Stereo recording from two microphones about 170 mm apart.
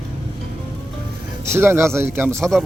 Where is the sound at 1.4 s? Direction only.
15° right (ahead or behind).